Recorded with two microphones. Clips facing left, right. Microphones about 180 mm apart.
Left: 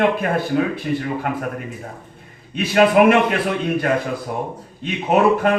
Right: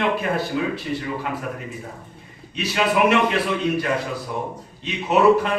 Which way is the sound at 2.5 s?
50° left (ahead or behind).